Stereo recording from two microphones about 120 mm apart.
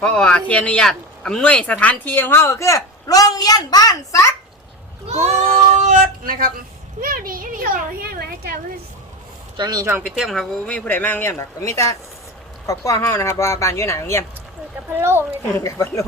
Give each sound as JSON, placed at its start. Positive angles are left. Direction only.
{"t": 0.0, "sound": "speech", "side_deg": 5}
{"t": 5.0, "sound": "a sound", "side_deg": -80}
{"t": 9.6, "sound": "speech", "side_deg": -35}
{"t": 9.8, "sound": "a woman's voice", "side_deg": -20}
{"t": 10.1, "sound": "speech", "side_deg": 0}
{"t": 14.9, "sound": "a woman's voice", "side_deg": -20}
{"t": 15.5, "sound": "speech", "side_deg": 25}